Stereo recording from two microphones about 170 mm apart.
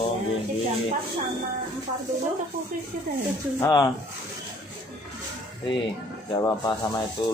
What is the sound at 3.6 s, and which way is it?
Speech, 25° left (ahead or behind).